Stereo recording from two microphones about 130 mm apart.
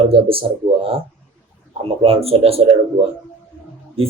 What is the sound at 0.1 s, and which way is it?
Speech, 45° right (ahead or behind).